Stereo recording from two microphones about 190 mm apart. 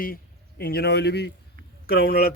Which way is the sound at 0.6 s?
55° left (ahead or behind).